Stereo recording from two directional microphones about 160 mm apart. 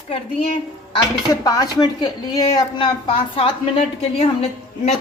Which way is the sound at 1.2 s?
20° left (ahead or behind).